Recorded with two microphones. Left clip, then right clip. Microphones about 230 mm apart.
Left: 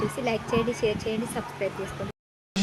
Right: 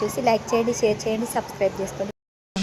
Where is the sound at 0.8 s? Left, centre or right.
Centre.